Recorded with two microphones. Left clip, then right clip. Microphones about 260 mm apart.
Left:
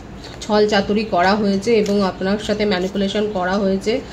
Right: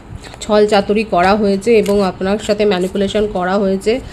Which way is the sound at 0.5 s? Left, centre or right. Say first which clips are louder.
Right 4 dB; right.